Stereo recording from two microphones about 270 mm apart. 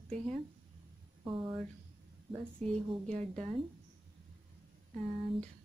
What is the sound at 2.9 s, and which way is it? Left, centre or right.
Speech, right.